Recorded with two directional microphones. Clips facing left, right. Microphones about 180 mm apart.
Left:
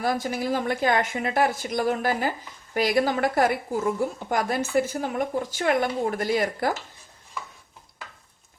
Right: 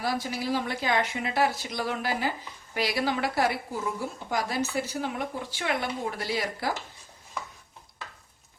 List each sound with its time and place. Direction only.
0.0 s a woman's voice: 50° left (ahead or behind)